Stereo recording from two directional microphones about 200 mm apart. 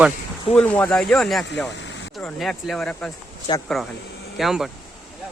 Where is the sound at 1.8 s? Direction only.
65° left (ahead or behind).